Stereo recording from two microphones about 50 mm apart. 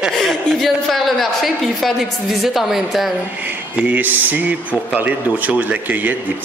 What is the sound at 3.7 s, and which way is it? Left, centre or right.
Speech, right.